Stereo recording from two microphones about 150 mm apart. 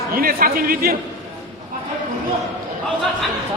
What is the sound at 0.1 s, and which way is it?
Speech, 80° right.